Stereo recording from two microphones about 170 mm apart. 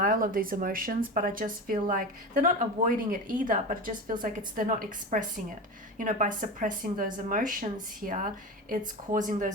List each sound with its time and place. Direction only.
0.0 s a woman's voice: 55° right (ahead or behind)